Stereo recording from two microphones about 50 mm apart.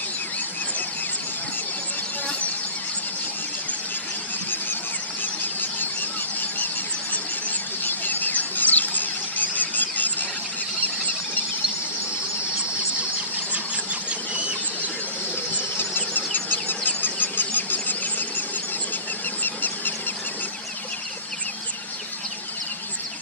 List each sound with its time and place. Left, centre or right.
5.2 s squeal: left
7.4 s squeal: left
15.8 s insect: left
19.4 s a sound: left